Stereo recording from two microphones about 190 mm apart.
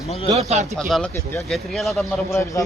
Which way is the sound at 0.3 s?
35° right (ahead or behind).